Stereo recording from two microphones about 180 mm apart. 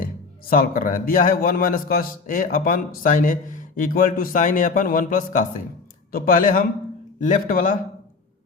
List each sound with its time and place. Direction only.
0.5 s a man's voice: 50° left (ahead or behind)